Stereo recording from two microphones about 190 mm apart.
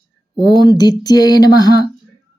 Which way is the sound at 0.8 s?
20° left (ahead or behind).